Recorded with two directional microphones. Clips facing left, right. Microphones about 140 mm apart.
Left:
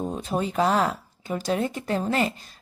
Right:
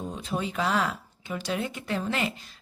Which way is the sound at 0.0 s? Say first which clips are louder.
Left 5 dB; 45° left (ahead or behind).